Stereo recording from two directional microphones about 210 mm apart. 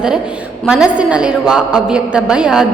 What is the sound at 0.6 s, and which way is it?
A woman's voice, 5° right (ahead or behind).